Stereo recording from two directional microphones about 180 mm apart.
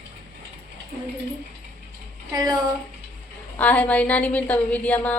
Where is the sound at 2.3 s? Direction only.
20° right (ahead or behind).